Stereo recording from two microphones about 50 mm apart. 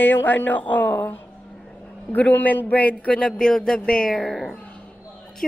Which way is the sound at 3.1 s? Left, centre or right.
Centre.